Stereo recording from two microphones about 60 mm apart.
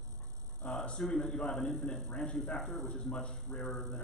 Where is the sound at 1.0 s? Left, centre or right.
Centre.